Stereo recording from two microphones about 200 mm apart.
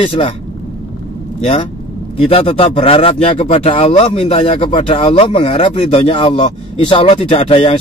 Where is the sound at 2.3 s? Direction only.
30° left (ahead or behind).